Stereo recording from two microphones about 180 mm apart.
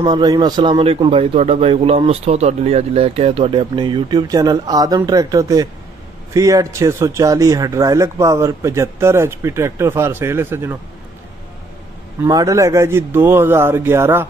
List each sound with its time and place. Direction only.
0.0 s speech: 20° right (ahead or behind)
12.2 s speech: 20° right (ahead or behind)